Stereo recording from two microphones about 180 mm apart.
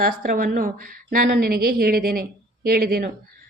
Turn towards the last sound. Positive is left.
turn(degrees=-55)  # may be behind; listen again after turning